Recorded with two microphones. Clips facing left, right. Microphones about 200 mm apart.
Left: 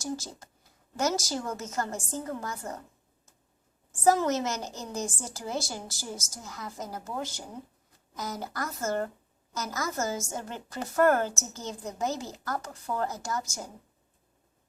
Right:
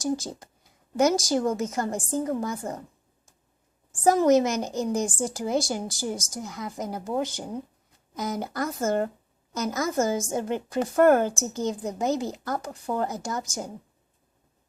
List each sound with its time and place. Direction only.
0.0 s a woman's voice: 15° right (ahead or behind)
4.0 s a woman's voice: 15° right (ahead or behind)